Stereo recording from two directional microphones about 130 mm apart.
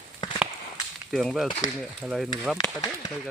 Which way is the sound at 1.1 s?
Centre (ahead or behind).